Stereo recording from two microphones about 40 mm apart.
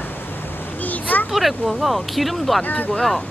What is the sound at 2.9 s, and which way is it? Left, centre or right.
Speech, centre.